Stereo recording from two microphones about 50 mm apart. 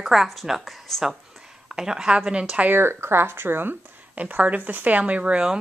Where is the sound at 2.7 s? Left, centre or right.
Right.